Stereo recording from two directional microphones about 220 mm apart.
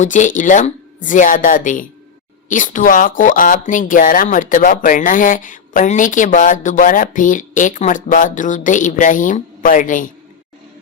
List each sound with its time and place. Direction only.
0.0 s speech: 35° left (ahead or behind)